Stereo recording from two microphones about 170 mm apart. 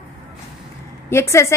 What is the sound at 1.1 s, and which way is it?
Speech, 15° left (ahead or behind).